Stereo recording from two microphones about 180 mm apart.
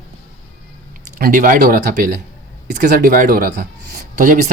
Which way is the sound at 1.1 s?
50° right (ahead or behind).